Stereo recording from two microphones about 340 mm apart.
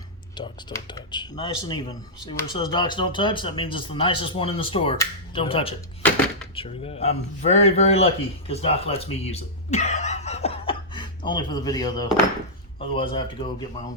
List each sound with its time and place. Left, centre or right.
0.3 s speech: centre
6.0 s a sound: centre
6.6 s a man's voice: centre